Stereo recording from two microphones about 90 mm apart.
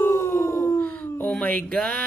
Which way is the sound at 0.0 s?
30° left (ahead or behind).